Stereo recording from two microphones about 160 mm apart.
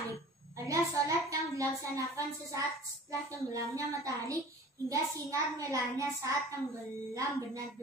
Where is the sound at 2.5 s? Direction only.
20° right (ahead or behind).